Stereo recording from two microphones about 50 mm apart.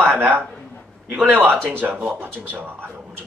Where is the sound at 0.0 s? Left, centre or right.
Right.